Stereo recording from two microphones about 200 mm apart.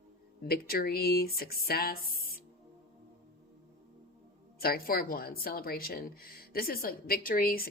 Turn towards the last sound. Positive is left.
turn(degrees=50)  # may be behind; listen again after turning